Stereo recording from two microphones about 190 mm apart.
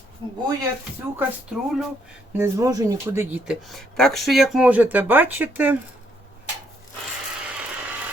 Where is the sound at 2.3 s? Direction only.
15° right (ahead or behind).